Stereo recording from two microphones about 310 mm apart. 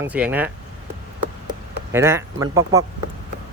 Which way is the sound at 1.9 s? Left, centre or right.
Centre.